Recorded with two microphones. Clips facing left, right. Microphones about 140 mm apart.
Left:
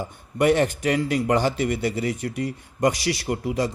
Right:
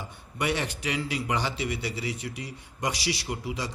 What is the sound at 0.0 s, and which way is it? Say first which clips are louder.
Speech: left 10 dB; 45° left (ahead or behind).